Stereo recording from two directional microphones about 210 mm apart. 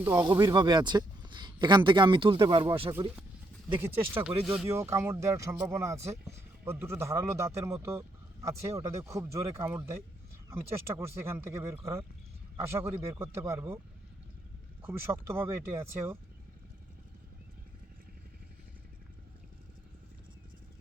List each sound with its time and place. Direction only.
0.0 s speech: 10° right (ahead or behind)
0.3 s speech: 20° right (ahead or behind)
3.8 s speech: 10° right (ahead or behind)
14.8 s speech: 10° right (ahead or behind)